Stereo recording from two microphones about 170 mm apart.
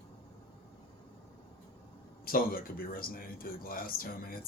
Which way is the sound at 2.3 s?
60° left (ahead or behind).